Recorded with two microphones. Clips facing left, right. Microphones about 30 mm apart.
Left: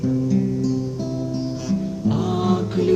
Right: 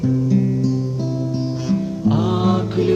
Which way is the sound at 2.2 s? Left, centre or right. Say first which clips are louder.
Right 2 dB; right.